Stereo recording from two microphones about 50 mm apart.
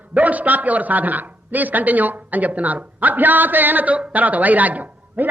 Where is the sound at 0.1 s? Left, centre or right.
Right.